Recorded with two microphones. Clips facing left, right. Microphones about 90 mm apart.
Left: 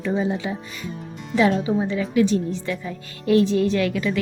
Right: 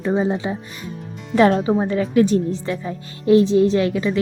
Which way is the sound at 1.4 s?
45° right (ahead or behind).